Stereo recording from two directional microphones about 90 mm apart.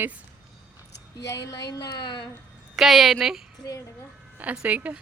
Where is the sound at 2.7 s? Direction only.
Centre (ahead or behind).